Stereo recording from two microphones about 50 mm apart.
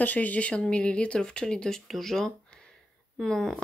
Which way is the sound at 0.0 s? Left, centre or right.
Left.